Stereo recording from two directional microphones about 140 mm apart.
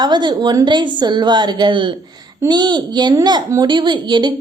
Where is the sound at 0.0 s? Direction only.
30° right (ahead or behind).